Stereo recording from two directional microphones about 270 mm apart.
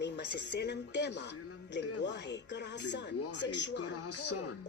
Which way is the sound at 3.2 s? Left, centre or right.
Left.